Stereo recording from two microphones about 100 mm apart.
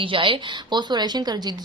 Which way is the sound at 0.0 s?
60° right (ahead or behind).